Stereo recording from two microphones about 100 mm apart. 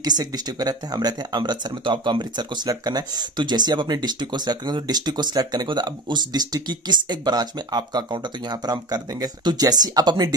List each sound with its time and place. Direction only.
0.0 s speech: 40° right (ahead or behind)